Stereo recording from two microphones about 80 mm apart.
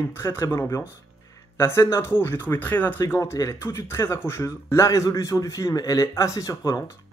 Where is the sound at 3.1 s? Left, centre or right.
Left.